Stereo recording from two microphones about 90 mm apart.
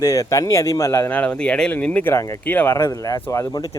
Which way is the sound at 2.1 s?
30° left (ahead or behind).